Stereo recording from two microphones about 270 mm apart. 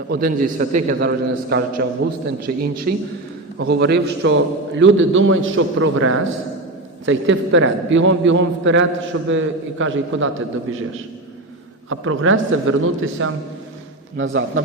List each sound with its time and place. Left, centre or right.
0.1 s a man's voice: right
11.9 s a man's voice: right